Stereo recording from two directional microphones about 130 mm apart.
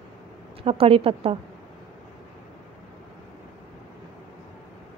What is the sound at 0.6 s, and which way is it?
Speech, 50° right (ahead or behind).